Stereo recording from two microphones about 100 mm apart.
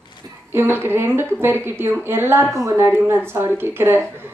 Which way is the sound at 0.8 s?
25° right (ahead or behind).